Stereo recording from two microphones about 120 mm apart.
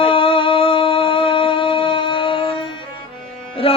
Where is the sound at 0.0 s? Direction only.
50° left (ahead or behind).